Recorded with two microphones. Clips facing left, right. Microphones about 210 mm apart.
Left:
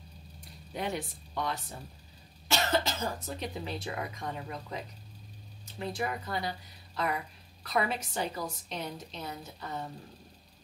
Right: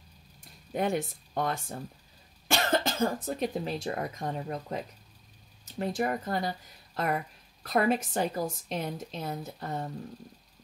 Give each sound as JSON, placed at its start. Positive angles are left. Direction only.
{"t": 0.7, "sound": "a woman's voice", "side_deg": -50}
{"t": 5.8, "sound": "a woman's voice", "side_deg": -45}
{"t": 7.6, "sound": "a woman's voice", "side_deg": -50}